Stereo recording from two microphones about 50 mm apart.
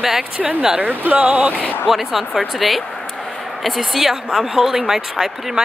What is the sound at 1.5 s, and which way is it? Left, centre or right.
Speech, left.